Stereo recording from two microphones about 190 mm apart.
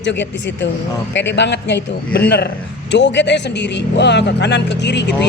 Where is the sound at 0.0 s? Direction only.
70° left (ahead or behind).